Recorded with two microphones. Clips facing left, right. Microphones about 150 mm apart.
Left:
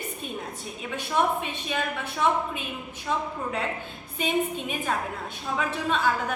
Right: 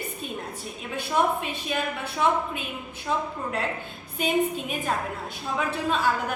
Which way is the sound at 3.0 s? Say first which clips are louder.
Right 1 dB; centre (ahead or behind).